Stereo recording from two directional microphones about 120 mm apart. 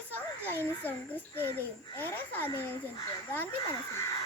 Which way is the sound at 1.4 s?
15° left (ahead or behind).